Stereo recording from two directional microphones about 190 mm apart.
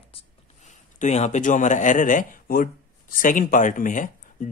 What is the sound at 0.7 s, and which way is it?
Speech, 40° left (ahead or behind).